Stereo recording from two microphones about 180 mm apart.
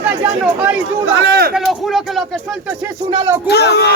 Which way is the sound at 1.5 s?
Centre (ahead or behind).